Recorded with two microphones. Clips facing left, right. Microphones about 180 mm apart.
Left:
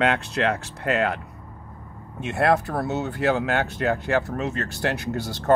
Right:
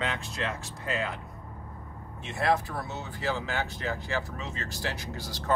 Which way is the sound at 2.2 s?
70° left (ahead or behind).